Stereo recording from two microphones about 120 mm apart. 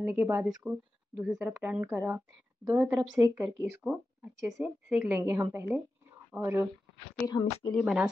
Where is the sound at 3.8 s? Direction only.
10° right (ahead or behind).